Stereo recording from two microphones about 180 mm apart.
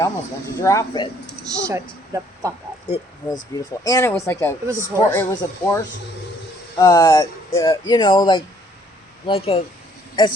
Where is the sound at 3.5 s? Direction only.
20° left (ahead or behind).